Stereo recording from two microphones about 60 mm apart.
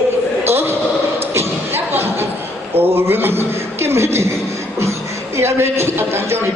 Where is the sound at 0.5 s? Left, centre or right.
Right.